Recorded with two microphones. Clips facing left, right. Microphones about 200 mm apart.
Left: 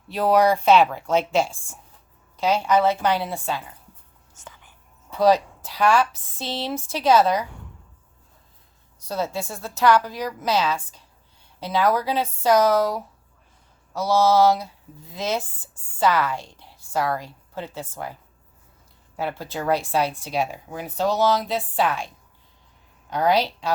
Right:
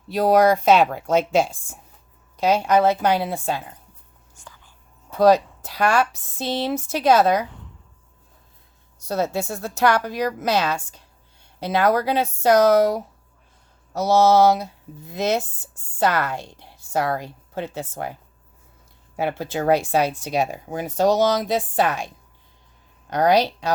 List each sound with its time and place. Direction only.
0.1 s speech: 45° right (ahead or behind)
2.3 s speech: 45° right (ahead or behind)
4.4 s whispering: 20° left (ahead or behind)
5.2 s speech: 45° right (ahead or behind)
9.0 s a woman's voice: 70° right (ahead or behind)
19.4 s a woman's voice: 70° right (ahead or behind)
19.8 s speech: 45° right (ahead or behind)
23.0 s speech: 80° right
23.3 s speech: 45° right (ahead or behind)